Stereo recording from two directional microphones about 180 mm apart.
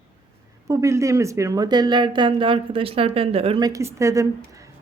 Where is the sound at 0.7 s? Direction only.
15° right (ahead or behind).